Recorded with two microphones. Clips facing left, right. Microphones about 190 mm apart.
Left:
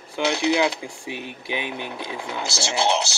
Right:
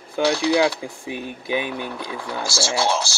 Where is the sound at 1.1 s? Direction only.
20° left (ahead or behind).